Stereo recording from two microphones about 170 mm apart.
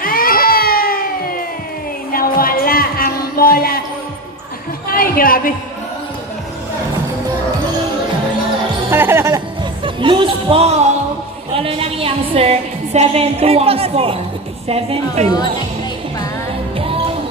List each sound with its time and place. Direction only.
0.0 s baby cry: 60° left (ahead or behind)
2.1 s music: 60° left (ahead or behind)
4.9 s a sound: 60° left (ahead or behind)
8.9 s music: 15° right (ahead or behind)
9.8 s music: 30° right (ahead or behind)
11.5 s a woman's voice: 35° right (ahead or behind)
16.7 s music: 35° right (ahead or behind)